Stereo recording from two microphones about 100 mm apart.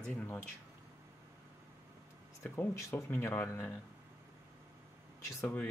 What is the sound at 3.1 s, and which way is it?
Speech, 20° left (ahead or behind).